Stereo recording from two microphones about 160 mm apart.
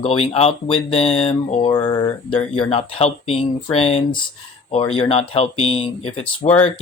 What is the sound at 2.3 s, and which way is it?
Speech, 35° left (ahead or behind).